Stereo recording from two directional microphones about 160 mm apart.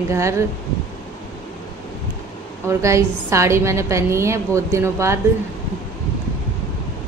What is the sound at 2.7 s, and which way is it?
A woman's voice, 20° right (ahead or behind).